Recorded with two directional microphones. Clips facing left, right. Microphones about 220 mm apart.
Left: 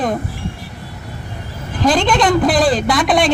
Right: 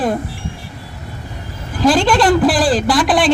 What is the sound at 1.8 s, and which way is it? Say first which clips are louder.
A man's voice: right 2 dB; 5° right (ahead or behind).